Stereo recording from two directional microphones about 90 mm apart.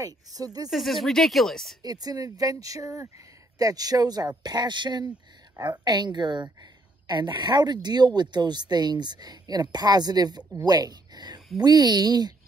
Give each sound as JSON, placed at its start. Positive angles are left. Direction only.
{"t": 0.0, "sound": "a woman's voice", "side_deg": -40}
{"t": 0.7, "sound": "speech", "side_deg": 0}
{"t": 1.8, "sound": "a woman's voice", "side_deg": -45}